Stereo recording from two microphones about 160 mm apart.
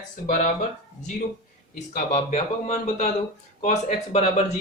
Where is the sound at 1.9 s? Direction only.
50° left (ahead or behind).